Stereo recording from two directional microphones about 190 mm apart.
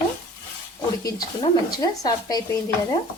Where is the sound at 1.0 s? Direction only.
20° left (ahead or behind).